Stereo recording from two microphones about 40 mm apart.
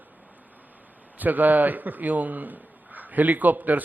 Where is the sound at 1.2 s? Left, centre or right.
Right.